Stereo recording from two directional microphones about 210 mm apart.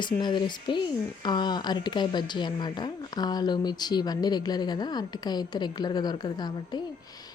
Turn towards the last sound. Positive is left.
turn(degrees=20)  # may be behind; listen again after turning